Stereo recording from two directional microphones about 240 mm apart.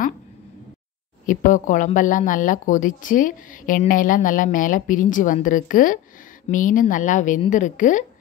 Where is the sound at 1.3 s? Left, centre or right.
Left.